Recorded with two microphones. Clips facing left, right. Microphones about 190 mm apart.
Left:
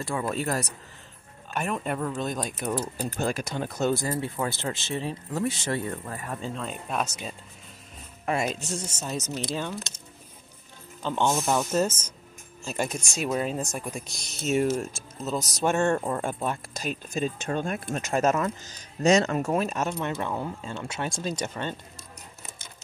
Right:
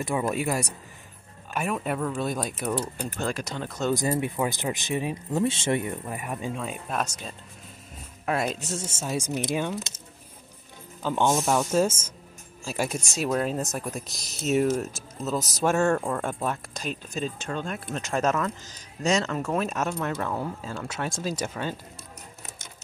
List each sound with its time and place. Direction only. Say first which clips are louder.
0.0 s speech: right 2 dB; 20° right (ahead or behind)
2.6 s speech: even; 5° left (ahead or behind)
3.9 s speech: right 2 dB; 20° right (ahead or behind); by 7.1 s 5° right (ahead or behind)
8.3 s speech: even; centre (ahead or behind)
17.5 s speech: left 3 dB; 50° left (ahead or behind)
18.0 s speech: left 1 dB; 5° left (ahead or behind)
19.5 s speech: left 1 dB; centre (ahead or behind)